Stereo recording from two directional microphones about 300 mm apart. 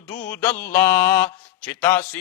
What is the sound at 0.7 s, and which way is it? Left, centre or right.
Speech, centre.